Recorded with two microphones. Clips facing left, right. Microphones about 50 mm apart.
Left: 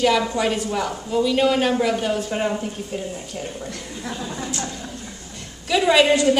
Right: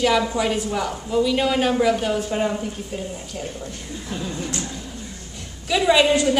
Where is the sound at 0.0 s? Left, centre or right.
Centre.